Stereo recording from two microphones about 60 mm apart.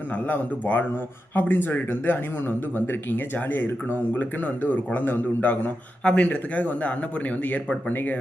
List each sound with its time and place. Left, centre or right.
0.1 s speech: left
6.0 s speech: centre